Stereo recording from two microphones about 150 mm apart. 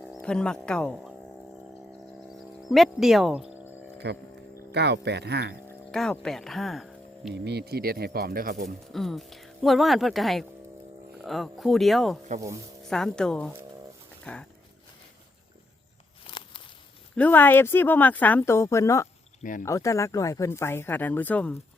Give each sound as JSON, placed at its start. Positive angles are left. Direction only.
{"t": 0.0, "sound": "speech", "side_deg": 5}
{"t": 2.6, "sound": "speech", "side_deg": 0}
{"t": 4.7, "sound": "speech", "side_deg": -90}
{"t": 5.9, "sound": "speech", "side_deg": 5}
{"t": 7.3, "sound": "speech", "side_deg": -90}
{"t": 8.9, "sound": "speech", "side_deg": 0}
{"t": 16.3, "sound": "walk", "side_deg": 35}
{"t": 17.2, "sound": "speech", "side_deg": 10}
{"t": 19.4, "sound": "speech", "side_deg": 60}
{"t": 19.6, "sound": "speech", "side_deg": 20}